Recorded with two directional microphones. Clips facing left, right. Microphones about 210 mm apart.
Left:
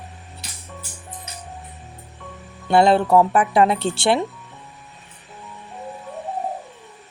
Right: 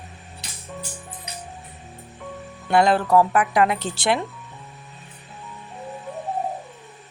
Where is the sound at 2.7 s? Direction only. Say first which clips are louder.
Left 3 dB; 25° left (ahead or behind).